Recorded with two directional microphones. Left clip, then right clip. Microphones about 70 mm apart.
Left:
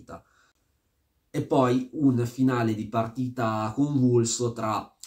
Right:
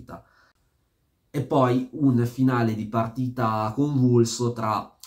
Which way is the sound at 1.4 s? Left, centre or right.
Left.